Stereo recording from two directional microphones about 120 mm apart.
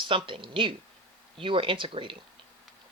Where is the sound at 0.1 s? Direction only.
45° right (ahead or behind).